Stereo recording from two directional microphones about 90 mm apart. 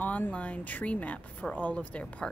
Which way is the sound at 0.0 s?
20° left (ahead or behind).